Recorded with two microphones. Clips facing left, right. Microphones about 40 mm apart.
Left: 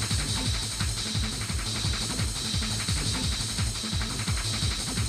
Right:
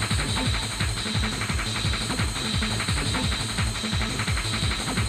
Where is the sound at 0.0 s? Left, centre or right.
Right.